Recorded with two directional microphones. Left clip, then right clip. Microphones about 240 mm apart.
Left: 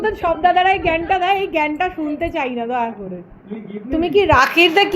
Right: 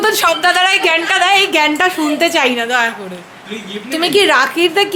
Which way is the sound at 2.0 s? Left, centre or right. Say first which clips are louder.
Right 8 dB; right.